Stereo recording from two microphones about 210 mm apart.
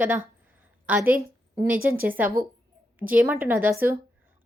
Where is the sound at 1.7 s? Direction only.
45° right (ahead or behind).